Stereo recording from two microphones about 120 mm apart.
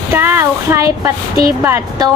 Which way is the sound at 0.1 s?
20° right (ahead or behind).